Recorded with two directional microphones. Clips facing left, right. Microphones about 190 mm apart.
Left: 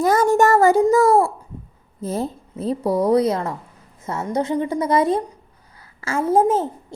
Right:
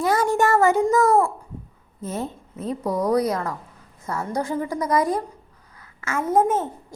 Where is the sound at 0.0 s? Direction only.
45° left (ahead or behind).